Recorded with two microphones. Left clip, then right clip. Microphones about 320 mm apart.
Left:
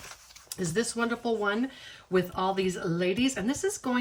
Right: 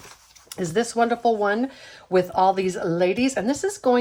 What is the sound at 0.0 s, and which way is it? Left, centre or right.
Speech, centre.